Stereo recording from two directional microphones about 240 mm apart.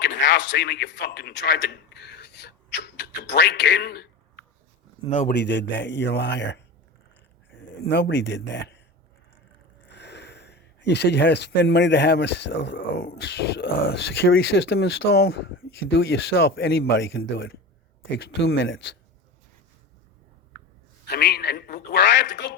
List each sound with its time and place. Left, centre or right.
0.0 s speech: left
5.0 s a man's voice: left
5.3 s speech: left
7.8 s speech: left
9.9 s a sound: left
11.6 s speech: left
18.6 s speech: left
21.1 s a man's voice: left